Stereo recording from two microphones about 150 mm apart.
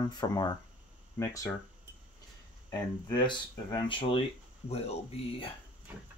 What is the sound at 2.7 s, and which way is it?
Speech, 30° left (ahead or behind).